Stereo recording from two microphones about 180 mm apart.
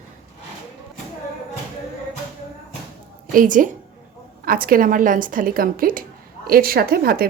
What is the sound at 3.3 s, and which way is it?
A woman's voice, 45° right (ahead or behind).